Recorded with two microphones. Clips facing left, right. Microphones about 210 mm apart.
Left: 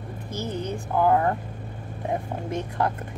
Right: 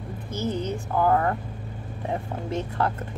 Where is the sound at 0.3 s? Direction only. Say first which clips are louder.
Right 2 dB; 15° left (ahead or behind).